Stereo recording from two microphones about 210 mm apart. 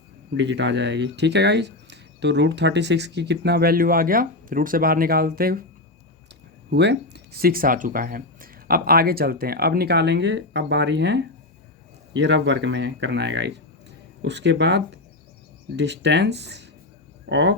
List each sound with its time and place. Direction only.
0.3 s speech: 55° right (ahead or behind)
6.7 s speech: 55° right (ahead or behind)